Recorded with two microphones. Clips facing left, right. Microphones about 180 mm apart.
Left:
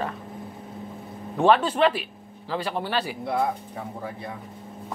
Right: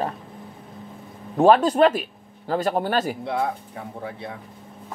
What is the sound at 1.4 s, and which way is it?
Speech, 40° right (ahead or behind).